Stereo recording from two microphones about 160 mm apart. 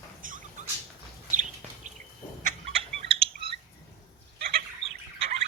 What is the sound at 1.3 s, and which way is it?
Bird, 50° right (ahead or behind).